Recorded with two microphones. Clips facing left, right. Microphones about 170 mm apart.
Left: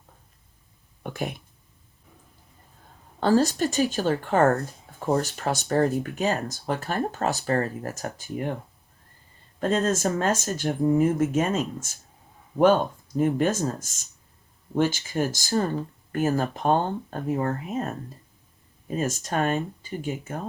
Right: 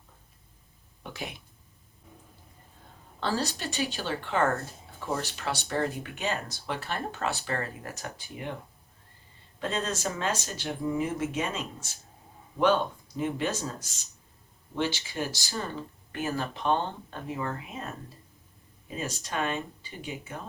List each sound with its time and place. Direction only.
1.0 s speech: 50° left (ahead or behind)
3.2 s speech: 45° left (ahead or behind)
9.6 s speech: 45° left (ahead or behind)